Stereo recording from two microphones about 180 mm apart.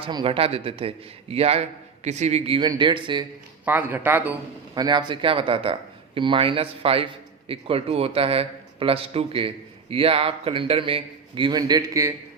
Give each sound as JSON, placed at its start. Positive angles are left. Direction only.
{"t": 0.0, "sound": "a man's voice", "side_deg": -30}
{"t": 2.6, "sound": "speech", "side_deg": -25}
{"t": 3.7, "sound": "a man's voice", "side_deg": -10}
{"t": 4.7, "sound": "a man's voice", "side_deg": -25}